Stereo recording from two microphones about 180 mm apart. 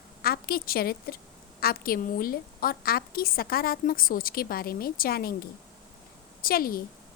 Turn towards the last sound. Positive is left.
turn(degrees=55)  # may be behind; listen again after turning